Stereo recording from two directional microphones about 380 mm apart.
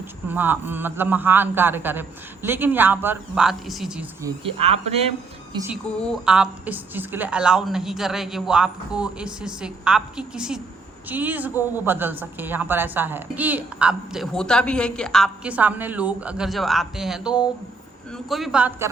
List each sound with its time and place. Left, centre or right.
0.3 s a woman's voice: centre
4.6 s speech: centre
5.5 s a woman's voice: centre